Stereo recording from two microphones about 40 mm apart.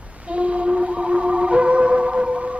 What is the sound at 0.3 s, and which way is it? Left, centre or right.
Music, right.